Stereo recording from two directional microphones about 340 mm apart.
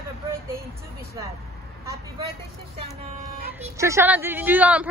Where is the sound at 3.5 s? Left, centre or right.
Centre.